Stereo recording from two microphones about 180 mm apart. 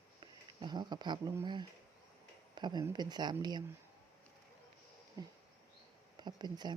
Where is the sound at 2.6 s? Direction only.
25° right (ahead or behind).